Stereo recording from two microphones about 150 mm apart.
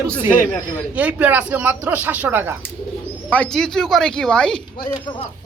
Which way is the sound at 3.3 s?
5° left (ahead or behind).